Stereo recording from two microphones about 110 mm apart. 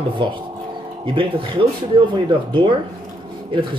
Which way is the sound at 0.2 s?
50° right (ahead or behind).